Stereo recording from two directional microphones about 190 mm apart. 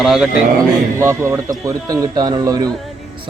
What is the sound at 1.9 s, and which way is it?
Speech, 20° right (ahead or behind).